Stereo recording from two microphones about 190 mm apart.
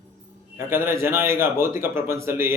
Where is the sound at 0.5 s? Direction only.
10° right (ahead or behind).